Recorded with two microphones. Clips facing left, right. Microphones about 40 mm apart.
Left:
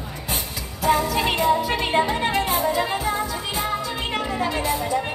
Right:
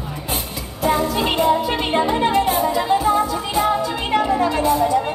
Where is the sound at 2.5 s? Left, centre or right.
Right.